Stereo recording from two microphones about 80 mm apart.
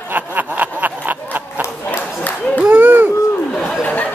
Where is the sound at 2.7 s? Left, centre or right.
Right.